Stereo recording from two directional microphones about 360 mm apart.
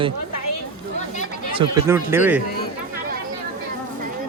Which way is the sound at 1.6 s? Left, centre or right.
Centre.